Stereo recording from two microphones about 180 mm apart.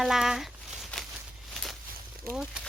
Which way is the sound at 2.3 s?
55° right (ahead or behind).